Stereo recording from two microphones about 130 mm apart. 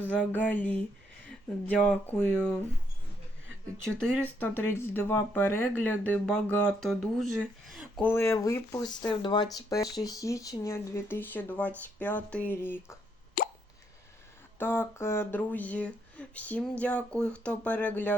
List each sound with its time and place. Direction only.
0.1 s speech: 10° left (ahead or behind)
4.4 s speech: 15° left (ahead or behind); by 8.0 s centre (ahead or behind)
8.0 s speech: 20° left (ahead or behind)
13.4 s plop: 90° left
14.6 s speech: 15° left (ahead or behind)